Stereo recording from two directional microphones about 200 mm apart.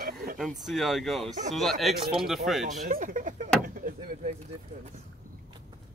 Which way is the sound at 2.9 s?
40° right (ahead or behind).